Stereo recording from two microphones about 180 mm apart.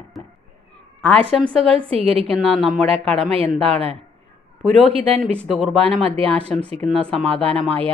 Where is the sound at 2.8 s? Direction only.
35° right (ahead or behind).